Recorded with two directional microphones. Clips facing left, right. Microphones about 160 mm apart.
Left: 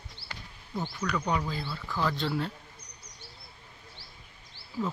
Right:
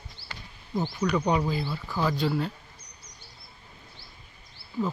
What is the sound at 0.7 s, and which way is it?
Speech, 20° right (ahead or behind).